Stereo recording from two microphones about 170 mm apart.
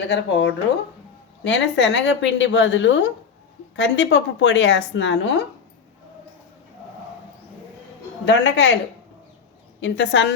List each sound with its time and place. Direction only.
0.0 s speech: 90° left
8.2 s speech: 90° left
9.8 s speech: 90° left